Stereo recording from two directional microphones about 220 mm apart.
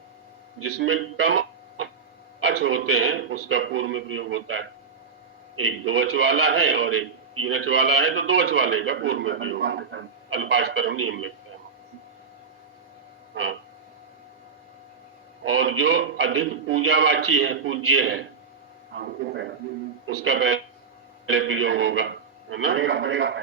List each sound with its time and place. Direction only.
0.6 s speech: 60° right (ahead or behind)
2.5 s a sound: 50° right (ahead or behind)
2.7 s a man's voice: 65° right (ahead or behind)
10.9 s a man's voice: 70° right (ahead or behind)
13.3 s a sound: 60° right (ahead or behind)
15.5 s a man's voice: 55° right (ahead or behind)
20.1 s a man's voice: 55° right (ahead or behind)